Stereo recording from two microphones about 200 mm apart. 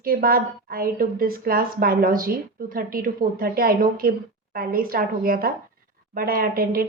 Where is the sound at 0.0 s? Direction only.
45° right (ahead or behind).